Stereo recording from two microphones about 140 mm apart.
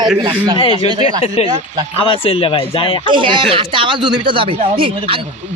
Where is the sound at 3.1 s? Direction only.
35° right (ahead or behind).